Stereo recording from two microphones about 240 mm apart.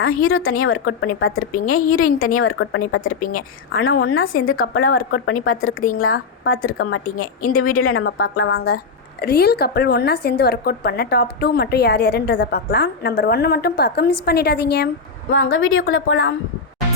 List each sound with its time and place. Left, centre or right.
0.0 s a woman's voice: left
3.1 s a woman's voice: left
4.0 s a woman's voice: left
4.6 s a woman's voice: left
5.1 s a woman's voice: left
9.2 s a woman's voice: left
15.3 s a woman's voice: left